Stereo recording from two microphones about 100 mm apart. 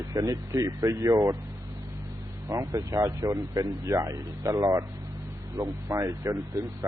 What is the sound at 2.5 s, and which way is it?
Speech, 30° right (ahead or behind).